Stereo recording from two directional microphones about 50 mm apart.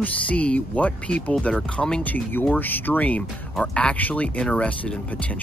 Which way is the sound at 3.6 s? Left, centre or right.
Left.